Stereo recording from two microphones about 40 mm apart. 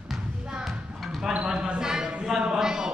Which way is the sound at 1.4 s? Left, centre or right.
Centre.